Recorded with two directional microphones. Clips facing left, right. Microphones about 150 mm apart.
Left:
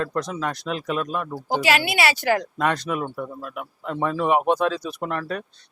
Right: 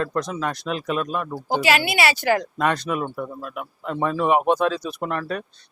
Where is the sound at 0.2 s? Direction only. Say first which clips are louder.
Right 1 dB; 15° right (ahead or behind).